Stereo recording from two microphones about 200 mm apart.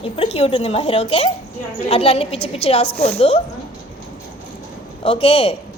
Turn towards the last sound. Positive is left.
turn(degrees=30)  # may be behind; listen again after turning